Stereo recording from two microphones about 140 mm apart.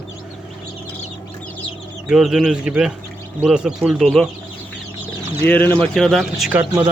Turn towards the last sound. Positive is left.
turn(degrees=-10)  # may be behind; listen again after turning